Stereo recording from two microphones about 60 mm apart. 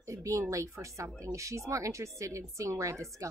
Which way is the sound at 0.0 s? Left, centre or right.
Right.